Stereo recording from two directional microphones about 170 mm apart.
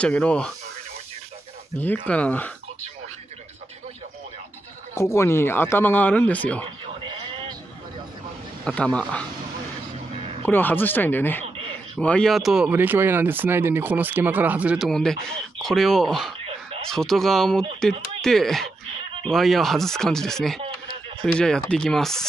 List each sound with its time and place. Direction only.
0.0 s speech: 5° left (ahead or behind)
2.0 s speech: 10° left (ahead or behind)
4.9 s speech: 15° left (ahead or behind)
7.1 s a sound: 30° right (ahead or behind)
8.6 s speech: 5° left (ahead or behind)
10.4 s speech: 10° left (ahead or behind)